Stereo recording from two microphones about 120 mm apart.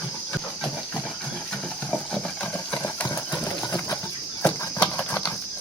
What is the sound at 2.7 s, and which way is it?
Engine, 15° left (ahead or behind).